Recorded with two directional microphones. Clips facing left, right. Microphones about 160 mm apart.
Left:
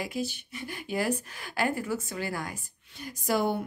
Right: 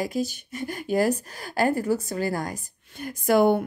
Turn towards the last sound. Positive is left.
turn(degrees=-60)  # may be behind; listen again after turning